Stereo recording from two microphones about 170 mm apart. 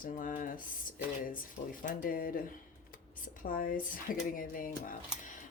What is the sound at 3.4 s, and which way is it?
Speech, 55° left (ahead or behind).